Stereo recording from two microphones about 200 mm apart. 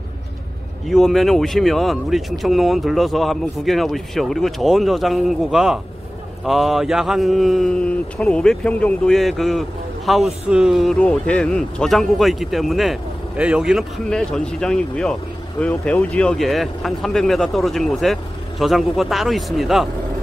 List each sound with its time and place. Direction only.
0.8 s speech: centre (ahead or behind)